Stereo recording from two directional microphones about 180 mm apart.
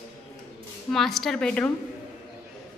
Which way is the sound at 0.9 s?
Centre (ahead or behind).